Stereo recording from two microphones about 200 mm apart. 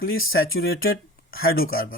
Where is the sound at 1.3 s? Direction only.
50° left (ahead or behind).